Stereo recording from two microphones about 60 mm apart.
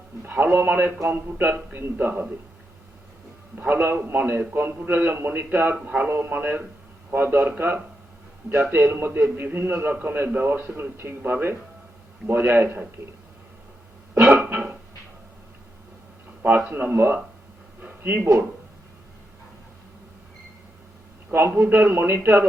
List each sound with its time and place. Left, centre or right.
0.2 s a man's voice: right
3.5 s a man's voice: right
8.9 s a man's voice: right
14.3 s music: right
16.4 s a man's voice: right
17.7 s a sound: right
21.6 s a man's voice: right